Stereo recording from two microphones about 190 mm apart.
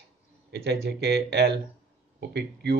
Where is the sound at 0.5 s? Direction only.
60° right (ahead or behind).